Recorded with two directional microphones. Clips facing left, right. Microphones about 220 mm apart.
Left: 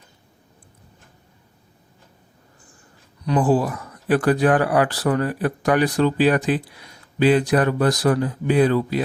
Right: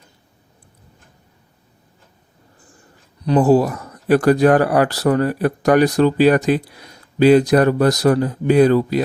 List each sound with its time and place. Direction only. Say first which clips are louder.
3.2 s speech: right 5 dB; 40° right (ahead or behind)